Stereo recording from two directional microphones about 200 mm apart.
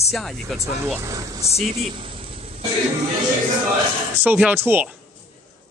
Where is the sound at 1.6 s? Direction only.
35° right (ahead or behind).